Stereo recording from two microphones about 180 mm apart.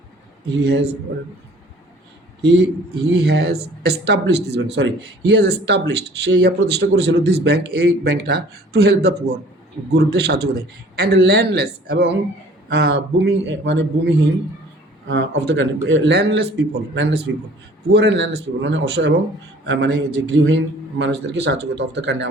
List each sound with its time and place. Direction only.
0.4 s speech: 70° right (ahead or behind)
2.4 s a man's voice: 70° right (ahead or behind)
19.6 s a man's voice: 90° right
21.0 s speech: 70° right (ahead or behind)